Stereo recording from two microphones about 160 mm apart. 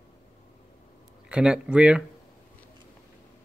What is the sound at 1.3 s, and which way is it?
Speech, 5° right (ahead or behind).